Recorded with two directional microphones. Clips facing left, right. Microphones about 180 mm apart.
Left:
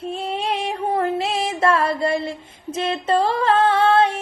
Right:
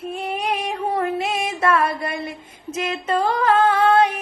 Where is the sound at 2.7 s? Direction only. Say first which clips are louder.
Left 3 dB; 30° left (ahead or behind).